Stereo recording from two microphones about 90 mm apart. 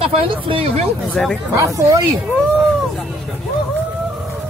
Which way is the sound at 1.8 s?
35° right (ahead or behind).